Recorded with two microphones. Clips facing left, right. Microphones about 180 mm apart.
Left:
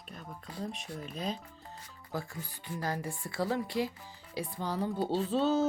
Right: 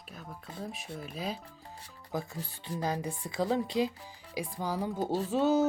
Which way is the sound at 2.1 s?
25° right (ahead or behind).